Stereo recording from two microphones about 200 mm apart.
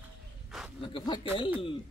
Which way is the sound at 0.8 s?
25° left (ahead or behind).